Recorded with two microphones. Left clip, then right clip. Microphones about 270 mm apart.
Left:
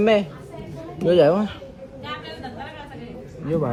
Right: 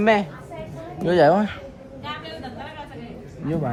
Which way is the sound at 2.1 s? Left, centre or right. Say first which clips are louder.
Even; centre.